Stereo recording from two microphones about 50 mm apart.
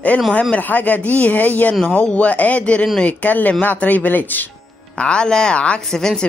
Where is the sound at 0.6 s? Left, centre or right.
Left.